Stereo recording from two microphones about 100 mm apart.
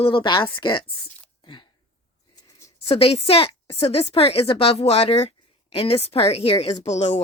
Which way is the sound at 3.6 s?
90° left.